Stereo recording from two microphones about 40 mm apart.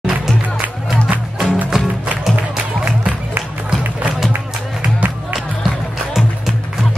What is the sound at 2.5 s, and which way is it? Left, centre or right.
Music, right.